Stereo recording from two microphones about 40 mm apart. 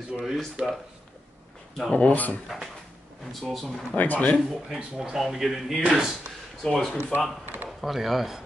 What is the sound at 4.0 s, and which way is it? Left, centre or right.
Speech, left.